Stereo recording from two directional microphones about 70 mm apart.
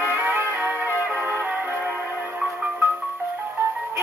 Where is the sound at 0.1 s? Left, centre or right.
Right.